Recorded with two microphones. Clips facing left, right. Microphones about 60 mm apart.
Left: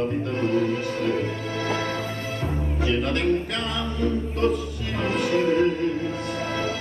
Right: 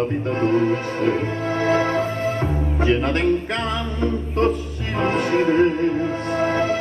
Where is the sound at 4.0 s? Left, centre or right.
Right.